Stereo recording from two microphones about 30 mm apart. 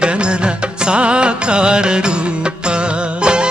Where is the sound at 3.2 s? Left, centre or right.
Right.